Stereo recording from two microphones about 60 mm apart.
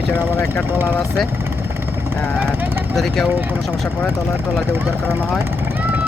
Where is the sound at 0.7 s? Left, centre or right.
Right.